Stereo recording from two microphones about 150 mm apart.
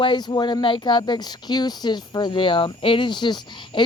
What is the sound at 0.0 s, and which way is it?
Speech, 30° left (ahead or behind).